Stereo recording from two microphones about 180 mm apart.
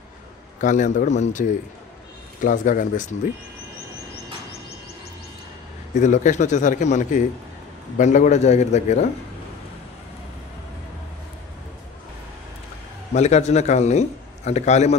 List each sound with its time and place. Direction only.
0.6 s speech: 45° left (ahead or behind)
5.9 s a man's voice: 40° left (ahead or behind)
13.1 s a man's voice: 40° left (ahead or behind)